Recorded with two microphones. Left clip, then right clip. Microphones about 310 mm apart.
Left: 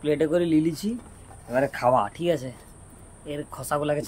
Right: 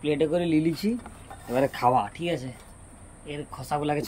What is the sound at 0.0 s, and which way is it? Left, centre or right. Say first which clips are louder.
Speech: left 2 dB; centre.